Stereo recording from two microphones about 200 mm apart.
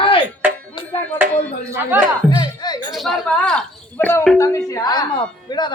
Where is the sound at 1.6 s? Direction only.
15° right (ahead or behind).